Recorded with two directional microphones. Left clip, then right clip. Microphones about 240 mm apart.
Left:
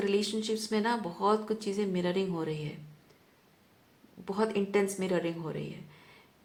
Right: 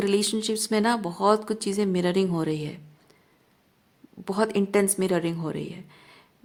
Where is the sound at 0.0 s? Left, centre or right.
Right.